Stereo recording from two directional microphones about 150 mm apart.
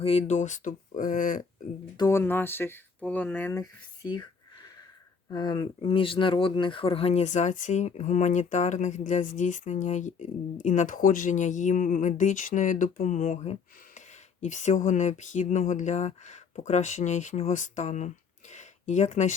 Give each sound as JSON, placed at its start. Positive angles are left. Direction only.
{"t": 0.0, "sound": "speech", "side_deg": 45}
{"t": 2.0, "sound": "speech", "side_deg": 20}
{"t": 3.5, "sound": "speech", "side_deg": 25}
{"t": 5.3, "sound": "speech", "side_deg": 30}